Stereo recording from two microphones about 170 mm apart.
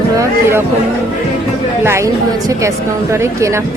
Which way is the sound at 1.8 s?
15° right (ahead or behind).